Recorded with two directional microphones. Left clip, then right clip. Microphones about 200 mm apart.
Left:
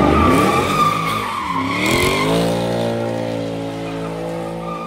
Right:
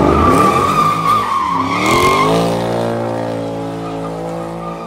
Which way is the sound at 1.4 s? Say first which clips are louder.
Right 4 dB; 35° right (ahead or behind).